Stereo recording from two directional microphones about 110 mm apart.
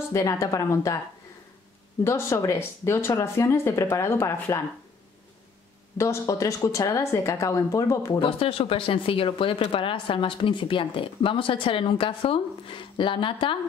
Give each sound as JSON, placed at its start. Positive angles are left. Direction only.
{"t": 0.1, "sound": "speech", "side_deg": 30}
{"t": 2.0, "sound": "speech", "side_deg": 25}
{"t": 5.9, "sound": "speech", "side_deg": 25}
{"t": 8.2, "sound": "speech", "side_deg": 55}